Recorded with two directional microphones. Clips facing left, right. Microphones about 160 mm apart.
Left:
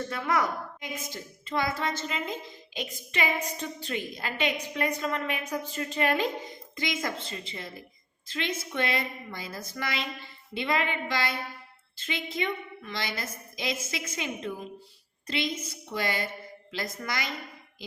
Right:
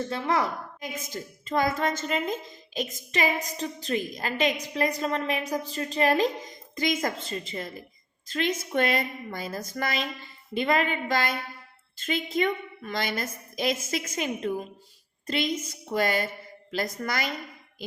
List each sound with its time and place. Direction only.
0.1 s a woman's voice: 30° right (ahead or behind)
0.8 s a woman's voice: 45° right (ahead or behind)
15.9 s a woman's voice: 45° right (ahead or behind)